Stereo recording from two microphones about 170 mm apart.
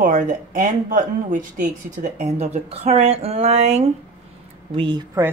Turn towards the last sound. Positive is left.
turn(degrees=-30)  # may be behind; listen again after turning